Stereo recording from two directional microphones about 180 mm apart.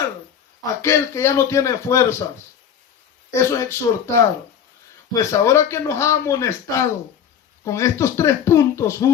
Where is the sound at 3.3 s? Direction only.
15° left (ahead or behind).